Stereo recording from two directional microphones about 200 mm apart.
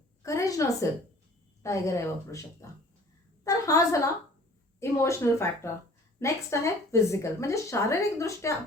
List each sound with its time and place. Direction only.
0.2 s a woman's voice: 15° left (ahead or behind)